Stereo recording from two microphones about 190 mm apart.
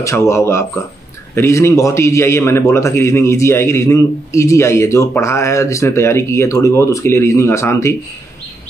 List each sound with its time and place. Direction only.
0.0 s a man's voice: 15° left (ahead or behind)